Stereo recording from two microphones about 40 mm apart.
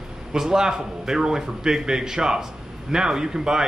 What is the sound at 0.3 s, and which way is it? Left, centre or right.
Speech, centre.